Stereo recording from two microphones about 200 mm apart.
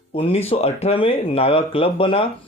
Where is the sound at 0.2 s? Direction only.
30° left (ahead or behind).